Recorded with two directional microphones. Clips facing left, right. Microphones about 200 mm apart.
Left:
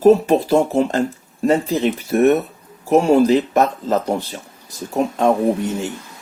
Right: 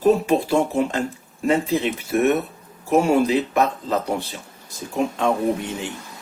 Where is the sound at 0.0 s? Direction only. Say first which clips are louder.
Left 5 dB; 40° left (ahead or behind).